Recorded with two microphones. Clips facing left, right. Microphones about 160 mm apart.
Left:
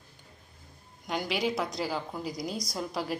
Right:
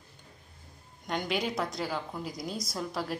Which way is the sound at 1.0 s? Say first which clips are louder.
Left 1 dB; centre (ahead or behind).